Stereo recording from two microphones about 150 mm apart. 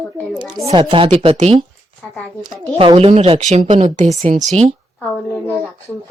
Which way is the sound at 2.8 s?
40° right (ahead or behind).